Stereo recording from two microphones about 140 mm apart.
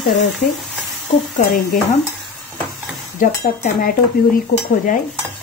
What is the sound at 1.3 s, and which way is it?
Speech, 60° left (ahead or behind).